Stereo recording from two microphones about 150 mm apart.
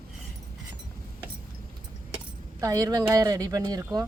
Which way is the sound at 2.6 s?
25° right (ahead or behind).